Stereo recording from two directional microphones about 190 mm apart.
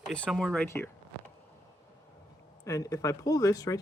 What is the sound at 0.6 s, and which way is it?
Speech, 15° left (ahead or behind).